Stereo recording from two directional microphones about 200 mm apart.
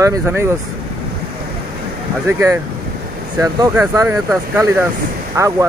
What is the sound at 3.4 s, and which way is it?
Speech, 15° right (ahead or behind).